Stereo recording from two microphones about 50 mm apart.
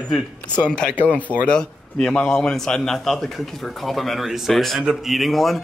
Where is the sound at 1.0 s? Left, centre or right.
Left.